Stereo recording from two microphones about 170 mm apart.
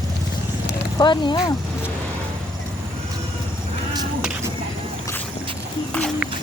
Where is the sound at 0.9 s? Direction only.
25° left (ahead or behind).